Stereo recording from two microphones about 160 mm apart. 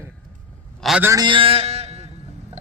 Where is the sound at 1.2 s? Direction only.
35° right (ahead or behind).